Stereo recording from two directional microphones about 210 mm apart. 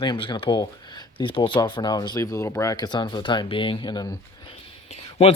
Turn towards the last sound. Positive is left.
turn(degrees=30)  # may be behind; listen again after turning